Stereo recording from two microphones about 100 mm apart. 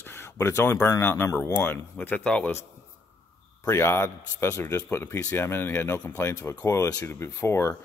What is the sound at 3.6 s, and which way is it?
A man's voice, 25° left (ahead or behind).